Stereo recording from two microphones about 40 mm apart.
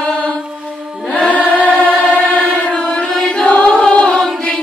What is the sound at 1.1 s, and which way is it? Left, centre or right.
Chant, left.